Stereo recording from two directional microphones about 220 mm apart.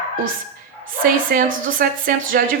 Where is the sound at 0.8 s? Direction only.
40° right (ahead or behind).